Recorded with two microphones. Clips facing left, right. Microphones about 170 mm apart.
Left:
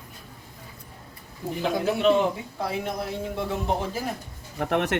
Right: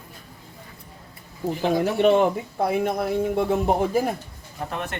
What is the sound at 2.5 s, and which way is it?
A man's voice, 55° right (ahead or behind).